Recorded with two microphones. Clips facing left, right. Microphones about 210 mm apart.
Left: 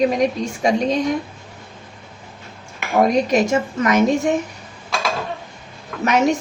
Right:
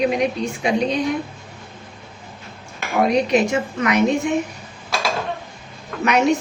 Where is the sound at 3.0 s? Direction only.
45° left (ahead or behind).